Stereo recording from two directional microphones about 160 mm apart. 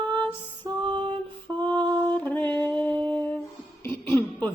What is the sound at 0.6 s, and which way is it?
Music, 30° right (ahead or behind).